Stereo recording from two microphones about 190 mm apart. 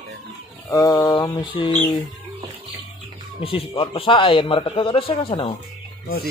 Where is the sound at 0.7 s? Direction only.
20° left (ahead or behind).